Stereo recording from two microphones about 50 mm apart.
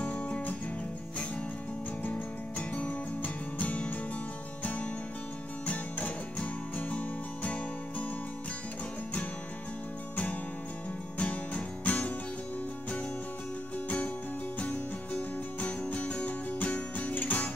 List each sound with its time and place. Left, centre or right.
0.0 s music: left
2.7 s music: left
5.7 s music: left
11.1 s music: left
13.8 s music: left